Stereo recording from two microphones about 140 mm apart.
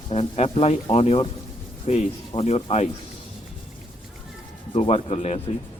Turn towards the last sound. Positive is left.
turn(degrees=50)  # may be behind; listen again after turning